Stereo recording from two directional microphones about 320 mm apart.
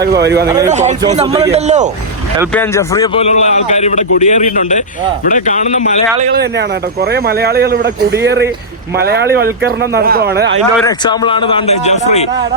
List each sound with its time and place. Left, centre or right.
0.0 s speech: right
0.4 s speech: centre
0.7 s speech: right
2.5 s a man's voice: centre
6.1 s speech: right
10.8 s a man's voice: centre